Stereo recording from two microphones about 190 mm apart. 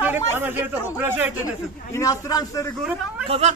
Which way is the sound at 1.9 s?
15° left (ahead or behind).